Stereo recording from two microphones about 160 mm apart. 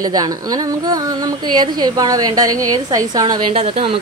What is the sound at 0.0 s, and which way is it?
A woman's voice, 25° right (ahead or behind).